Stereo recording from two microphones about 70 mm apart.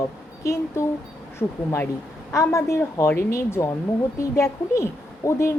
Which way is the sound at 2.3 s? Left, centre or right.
Left.